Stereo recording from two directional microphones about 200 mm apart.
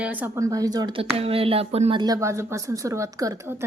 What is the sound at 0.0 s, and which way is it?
Speech, 10° right (ahead or behind).